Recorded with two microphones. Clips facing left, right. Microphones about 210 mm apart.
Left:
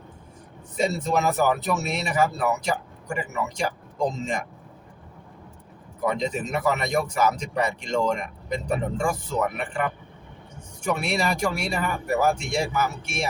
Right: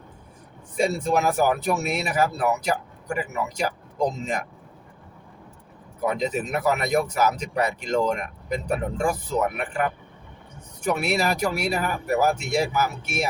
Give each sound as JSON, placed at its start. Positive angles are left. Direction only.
{"t": 0.8, "sound": "speech", "side_deg": -10}
{"t": 6.0, "sound": "speech", "side_deg": -5}
{"t": 10.8, "sound": "speech", "side_deg": -5}